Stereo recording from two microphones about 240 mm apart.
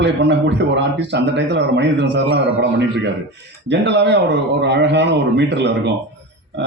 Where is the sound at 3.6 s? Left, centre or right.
Right.